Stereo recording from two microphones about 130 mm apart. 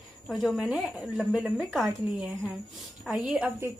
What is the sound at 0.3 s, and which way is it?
A woman's voice, centre (ahead or behind).